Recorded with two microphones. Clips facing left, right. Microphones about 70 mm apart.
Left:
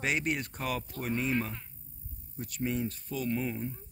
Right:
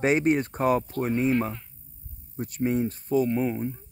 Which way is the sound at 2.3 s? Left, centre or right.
Right.